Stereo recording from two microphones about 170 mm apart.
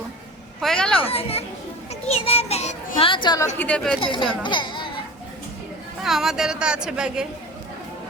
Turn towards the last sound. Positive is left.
turn(degrees=-5)  # may be behind; listen again after turning